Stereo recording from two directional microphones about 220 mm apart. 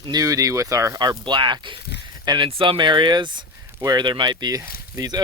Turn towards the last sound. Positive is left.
turn(degrees=-15)  # may be behind; listen again after turning